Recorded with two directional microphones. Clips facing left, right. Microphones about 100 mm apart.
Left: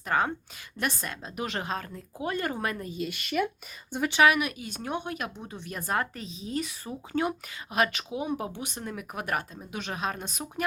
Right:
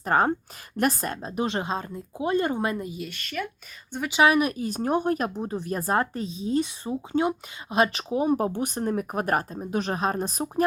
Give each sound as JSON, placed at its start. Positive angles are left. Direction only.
{"t": 0.0, "sound": "speech", "side_deg": -40}
{"t": 1.5, "sound": "speech", "side_deg": -25}
{"t": 3.0, "sound": "speech", "side_deg": 10}
{"t": 4.2, "sound": "speech", "side_deg": -35}